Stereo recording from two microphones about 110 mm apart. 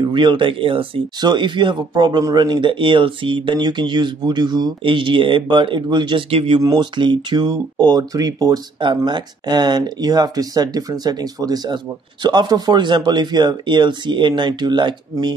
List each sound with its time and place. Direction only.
0.0 s speech: 45° right (ahead or behind)
6.6 s speech: 40° right (ahead or behind)